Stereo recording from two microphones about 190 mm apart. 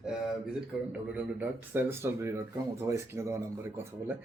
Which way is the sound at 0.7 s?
5° right (ahead or behind).